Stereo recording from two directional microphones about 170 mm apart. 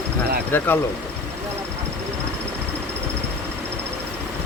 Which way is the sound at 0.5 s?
10° left (ahead or behind).